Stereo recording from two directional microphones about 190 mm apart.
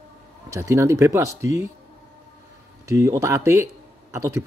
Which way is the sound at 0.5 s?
15° right (ahead or behind).